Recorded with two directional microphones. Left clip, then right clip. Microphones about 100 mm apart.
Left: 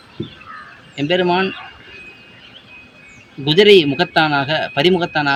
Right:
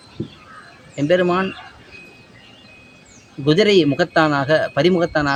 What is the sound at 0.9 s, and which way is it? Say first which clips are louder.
Speech: left 1 dB; 40° right (ahead or behind).